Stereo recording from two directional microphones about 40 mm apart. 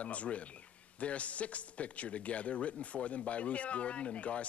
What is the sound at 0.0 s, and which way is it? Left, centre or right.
A man's voice, left.